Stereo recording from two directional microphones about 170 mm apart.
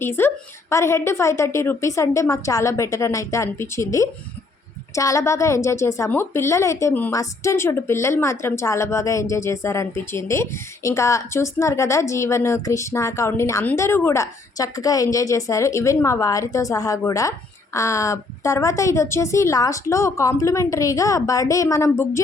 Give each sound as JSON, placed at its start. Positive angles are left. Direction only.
{"t": 0.0, "sound": "a woman's voice", "side_deg": 15}